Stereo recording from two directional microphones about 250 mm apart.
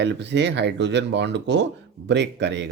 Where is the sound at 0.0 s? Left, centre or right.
Right.